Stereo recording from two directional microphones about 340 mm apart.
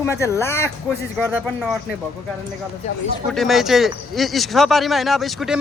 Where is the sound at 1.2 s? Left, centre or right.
Centre.